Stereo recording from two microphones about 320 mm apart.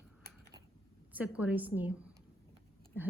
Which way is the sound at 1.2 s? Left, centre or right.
Centre.